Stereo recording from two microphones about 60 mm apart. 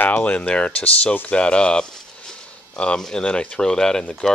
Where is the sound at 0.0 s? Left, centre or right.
Left.